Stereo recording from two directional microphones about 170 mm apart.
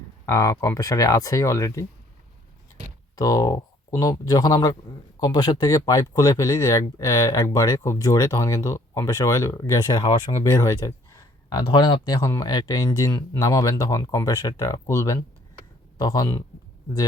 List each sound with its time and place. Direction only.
0.3 s speech: 15° left (ahead or behind)
3.2 s speech: 20° left (ahead or behind)
10.4 s speech: 15° left (ahead or behind)